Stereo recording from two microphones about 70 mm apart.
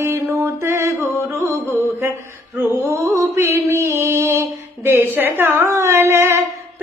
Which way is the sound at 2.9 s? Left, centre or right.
Right.